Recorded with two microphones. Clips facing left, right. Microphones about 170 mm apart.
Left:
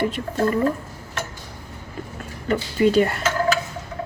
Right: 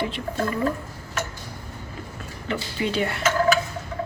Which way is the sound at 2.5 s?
45° left (ahead or behind).